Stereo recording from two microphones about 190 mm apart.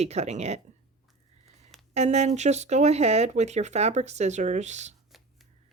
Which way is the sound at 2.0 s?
35° right (ahead or behind).